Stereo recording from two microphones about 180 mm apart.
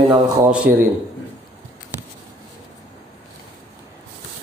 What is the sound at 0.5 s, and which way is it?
Speech, 5° right (ahead or behind).